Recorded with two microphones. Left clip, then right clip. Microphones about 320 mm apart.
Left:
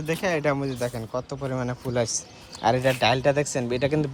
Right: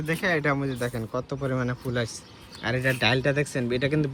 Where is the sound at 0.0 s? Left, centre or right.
Centre.